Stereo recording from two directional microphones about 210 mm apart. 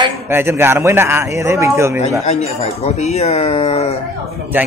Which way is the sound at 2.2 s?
30° left (ahead or behind).